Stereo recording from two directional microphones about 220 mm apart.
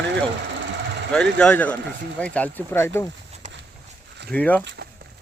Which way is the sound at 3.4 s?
30° right (ahead or behind).